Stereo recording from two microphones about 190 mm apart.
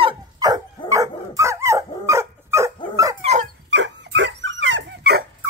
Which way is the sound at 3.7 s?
70° right (ahead or behind).